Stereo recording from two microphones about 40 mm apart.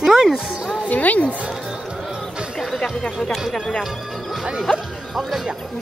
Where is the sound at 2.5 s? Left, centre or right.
Centre.